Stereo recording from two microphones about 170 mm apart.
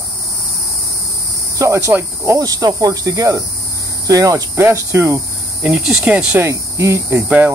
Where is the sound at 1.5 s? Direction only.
20° right (ahead or behind).